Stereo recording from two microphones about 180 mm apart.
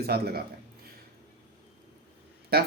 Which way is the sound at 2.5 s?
60° right (ahead or behind).